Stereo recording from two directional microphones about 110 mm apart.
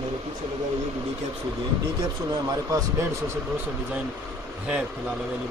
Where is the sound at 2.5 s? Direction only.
30° right (ahead or behind).